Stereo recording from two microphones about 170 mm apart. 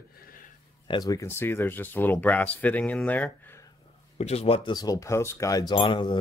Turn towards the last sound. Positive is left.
turn(degrees=30)  # may be behind; listen again after turning